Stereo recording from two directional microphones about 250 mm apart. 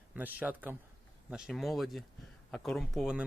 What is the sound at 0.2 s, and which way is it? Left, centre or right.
Speech, centre.